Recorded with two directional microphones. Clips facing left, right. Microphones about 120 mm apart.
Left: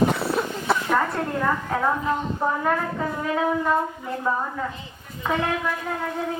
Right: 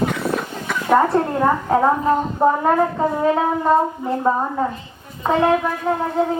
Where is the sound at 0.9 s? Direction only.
30° right (ahead or behind).